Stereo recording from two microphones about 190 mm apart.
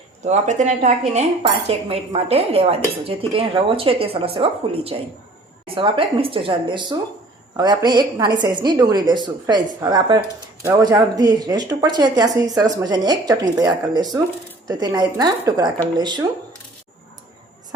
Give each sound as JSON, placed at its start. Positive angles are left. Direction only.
{"t": 0.3, "sound": "speech", "side_deg": -40}